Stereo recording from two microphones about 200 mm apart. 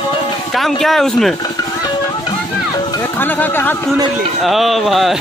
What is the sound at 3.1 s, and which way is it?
A man's voice, 10° left (ahead or behind).